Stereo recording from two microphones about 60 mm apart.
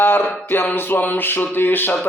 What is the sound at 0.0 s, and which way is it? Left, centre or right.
Music, left.